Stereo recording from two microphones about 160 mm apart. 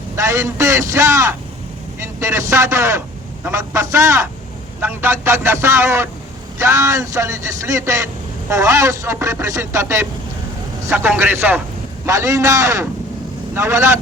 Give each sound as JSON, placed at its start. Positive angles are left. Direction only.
{"t": 0.2, "sound": "a man's voice", "side_deg": -20}